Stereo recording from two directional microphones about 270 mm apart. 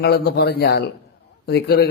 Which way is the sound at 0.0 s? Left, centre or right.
Left.